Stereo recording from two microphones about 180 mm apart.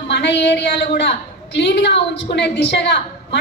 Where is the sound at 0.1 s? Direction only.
70° left (ahead or behind).